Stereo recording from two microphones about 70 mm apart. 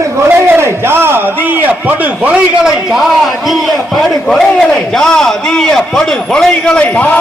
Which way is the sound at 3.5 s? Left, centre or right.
Centre.